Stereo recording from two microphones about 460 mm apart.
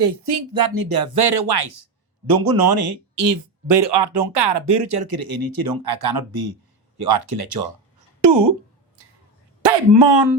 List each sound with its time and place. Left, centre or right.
0.0 s speech: right
9.0 s a sound: right
9.6 s speech: right